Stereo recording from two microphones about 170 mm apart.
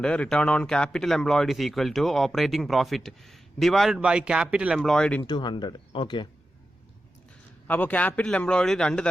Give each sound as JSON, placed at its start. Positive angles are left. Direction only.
{"t": 0.0, "sound": "speech", "side_deg": 5}
{"t": 5.2, "sound": "speech", "side_deg": 25}
{"t": 7.7, "sound": "a man's voice", "side_deg": 10}